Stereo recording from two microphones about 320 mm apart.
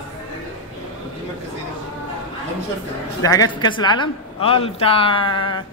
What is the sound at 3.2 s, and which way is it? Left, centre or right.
A woman's voice, centre.